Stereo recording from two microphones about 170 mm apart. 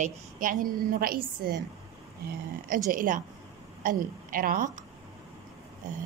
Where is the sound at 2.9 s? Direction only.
50° right (ahead or behind).